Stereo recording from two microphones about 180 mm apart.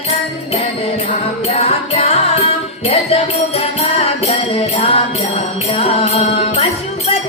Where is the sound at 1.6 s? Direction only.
35° left (ahead or behind).